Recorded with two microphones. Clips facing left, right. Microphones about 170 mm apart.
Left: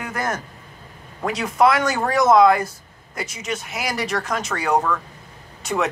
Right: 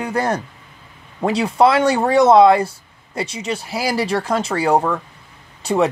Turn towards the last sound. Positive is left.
turn(degrees=-30)  # may be behind; listen again after turning